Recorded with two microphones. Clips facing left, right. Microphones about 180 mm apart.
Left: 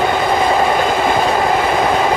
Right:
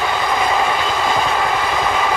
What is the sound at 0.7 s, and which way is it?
Train, 50° left (ahead or behind).